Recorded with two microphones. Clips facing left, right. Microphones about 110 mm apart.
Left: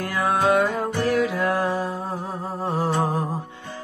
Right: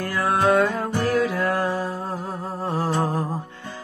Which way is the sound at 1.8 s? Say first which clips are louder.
Even; centre (ahead or behind).